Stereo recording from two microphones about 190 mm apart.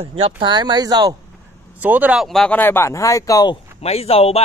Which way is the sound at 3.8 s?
30° left (ahead or behind).